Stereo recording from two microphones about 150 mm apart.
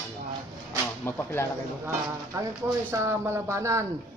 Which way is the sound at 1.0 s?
15° left (ahead or behind).